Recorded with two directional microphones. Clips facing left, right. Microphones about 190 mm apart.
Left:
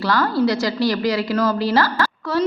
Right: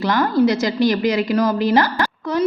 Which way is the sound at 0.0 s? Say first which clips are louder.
Right 2 dB; 20° right (ahead or behind).